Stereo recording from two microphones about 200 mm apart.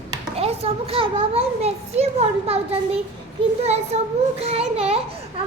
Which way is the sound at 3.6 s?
30° right (ahead or behind).